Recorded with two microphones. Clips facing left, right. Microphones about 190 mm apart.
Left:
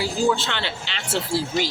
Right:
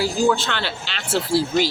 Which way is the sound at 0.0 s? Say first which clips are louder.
Right 2 dB; 20° left (ahead or behind).